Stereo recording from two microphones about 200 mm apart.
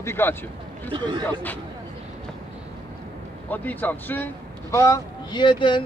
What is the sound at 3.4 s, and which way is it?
A man's voice, 10° left (ahead or behind).